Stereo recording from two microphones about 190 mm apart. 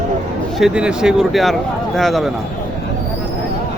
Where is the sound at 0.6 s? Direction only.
5° right (ahead or behind).